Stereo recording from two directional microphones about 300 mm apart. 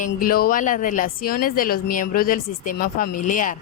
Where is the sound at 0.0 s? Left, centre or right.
Left.